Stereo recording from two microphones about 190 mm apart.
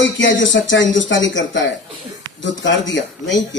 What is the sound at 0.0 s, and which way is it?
Speech, 75° left (ahead or behind).